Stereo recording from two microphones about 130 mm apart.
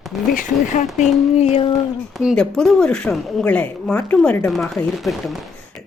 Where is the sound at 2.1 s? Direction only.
5° right (ahead or behind).